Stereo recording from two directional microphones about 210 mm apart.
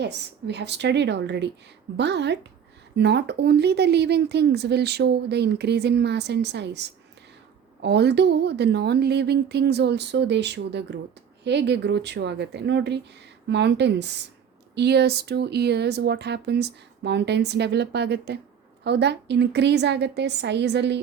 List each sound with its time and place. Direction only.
0.0 s a woman's voice: 55° right (ahead or behind)